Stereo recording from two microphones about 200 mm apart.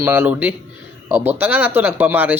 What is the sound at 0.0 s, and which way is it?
Speech, 10° right (ahead or behind).